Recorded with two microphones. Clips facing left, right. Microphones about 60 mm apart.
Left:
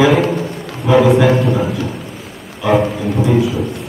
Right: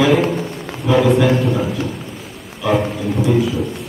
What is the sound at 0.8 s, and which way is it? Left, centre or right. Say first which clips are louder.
A man's voice: left 3 dB; centre.